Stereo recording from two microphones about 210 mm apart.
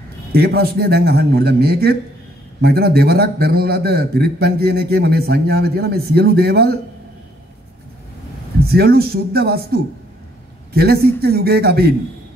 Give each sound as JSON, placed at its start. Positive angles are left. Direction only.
{"t": 0.3, "sound": "a man's voice", "side_deg": -50}
{"t": 8.6, "sound": "a man's voice", "side_deg": -45}